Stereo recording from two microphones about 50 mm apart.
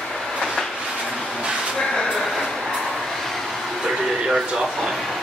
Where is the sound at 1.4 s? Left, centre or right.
Centre.